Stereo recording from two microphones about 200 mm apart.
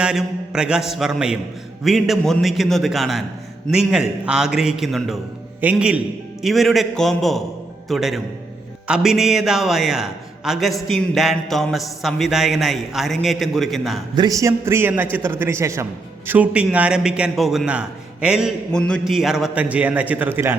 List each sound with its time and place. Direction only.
0.0 s a man's voice: 5° right (ahead or behind)
14.2 s a man's voice: 15° right (ahead or behind)